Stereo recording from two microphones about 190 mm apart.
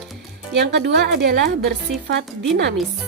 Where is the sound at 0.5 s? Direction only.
60° right (ahead or behind).